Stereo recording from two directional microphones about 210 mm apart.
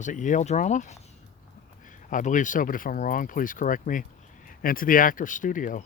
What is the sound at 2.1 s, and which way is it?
Speech, 40° left (ahead or behind).